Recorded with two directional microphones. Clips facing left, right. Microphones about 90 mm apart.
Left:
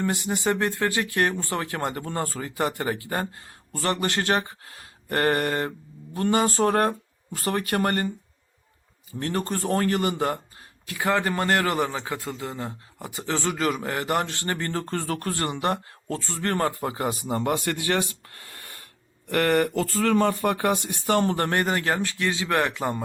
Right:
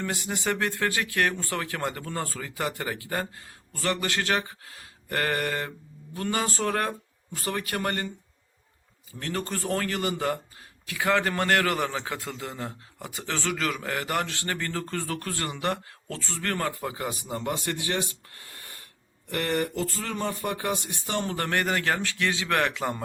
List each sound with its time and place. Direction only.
0.0 s speech: 20° left (ahead or behind)
1.3 s speech: 20° left (ahead or behind)
1.6 s speech: 35° left (ahead or behind)
9.1 s speech: 35° left (ahead or behind)
11.0 s a man's voice: 15° left (ahead or behind)
16.5 s speech: 35° left (ahead or behind); by 23.0 s 20° left (ahead or behind)